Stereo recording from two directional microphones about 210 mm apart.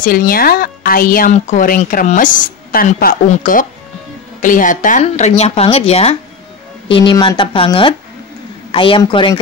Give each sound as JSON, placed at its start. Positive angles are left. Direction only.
{"t": 0.0, "sound": "speech", "side_deg": 45}